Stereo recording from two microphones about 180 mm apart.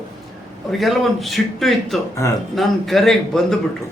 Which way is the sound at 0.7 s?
Centre (ahead or behind).